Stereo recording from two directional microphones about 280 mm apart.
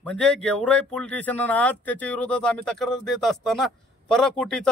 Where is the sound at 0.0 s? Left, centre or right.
Centre.